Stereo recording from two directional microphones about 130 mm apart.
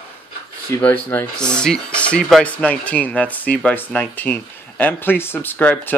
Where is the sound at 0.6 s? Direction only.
15° left (ahead or behind).